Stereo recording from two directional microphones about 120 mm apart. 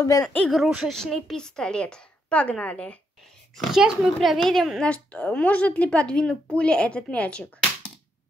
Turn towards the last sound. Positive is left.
turn(degrees=10)  # may be behind; listen again after turning